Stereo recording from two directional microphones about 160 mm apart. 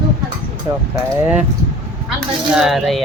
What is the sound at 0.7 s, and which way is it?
Speech, 25° right (ahead or behind).